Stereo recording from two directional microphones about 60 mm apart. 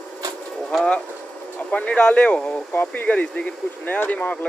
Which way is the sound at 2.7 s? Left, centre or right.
Left.